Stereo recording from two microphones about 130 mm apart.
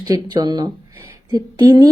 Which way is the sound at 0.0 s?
30° right (ahead or behind).